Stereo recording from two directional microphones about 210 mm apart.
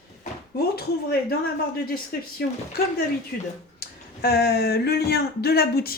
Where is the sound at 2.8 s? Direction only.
45° left (ahead or behind).